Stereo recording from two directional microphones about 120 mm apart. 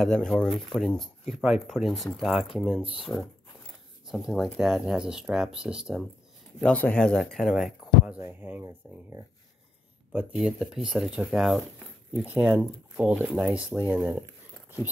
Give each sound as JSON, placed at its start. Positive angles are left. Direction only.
{"t": 0.0, "sound": "speech", "side_deg": 5}
{"t": 6.6, "sound": "speech", "side_deg": 10}
{"t": 10.1, "sound": "speech", "side_deg": -5}